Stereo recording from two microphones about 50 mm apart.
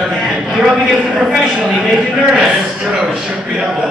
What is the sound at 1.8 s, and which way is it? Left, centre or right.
A man's voice, centre.